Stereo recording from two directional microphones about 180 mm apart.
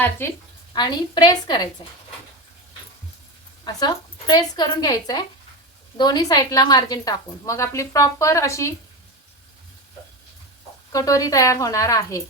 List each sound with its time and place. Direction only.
0.0 s a woman's voice: 15° left (ahead or behind)
3.6 s a woman's voice: 20° left (ahead or behind)
10.9 s a woman's voice: 20° left (ahead or behind)